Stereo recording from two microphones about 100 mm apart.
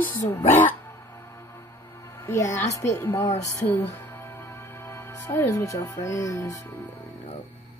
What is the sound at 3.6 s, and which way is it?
Music, 20° left (ahead or behind).